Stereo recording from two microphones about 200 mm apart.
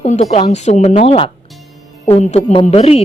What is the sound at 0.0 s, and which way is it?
A woman's voice, 35° left (ahead or behind).